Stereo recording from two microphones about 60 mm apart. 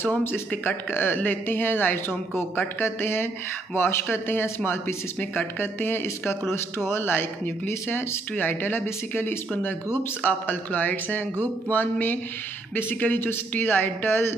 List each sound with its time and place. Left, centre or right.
0.0 s speech: left
10.2 s speech: left